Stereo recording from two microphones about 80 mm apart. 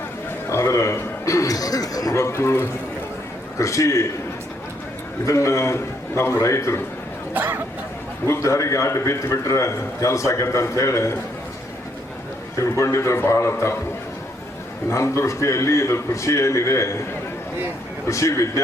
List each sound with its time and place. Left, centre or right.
0.5 s a man's voice: left
2.2 s a man's voice: left
5.2 s a man's voice: left
7.3 s speech: right
8.3 s a man's voice: left
12.7 s a man's voice: left
14.8 s a man's voice: left
18.1 s a man's voice: left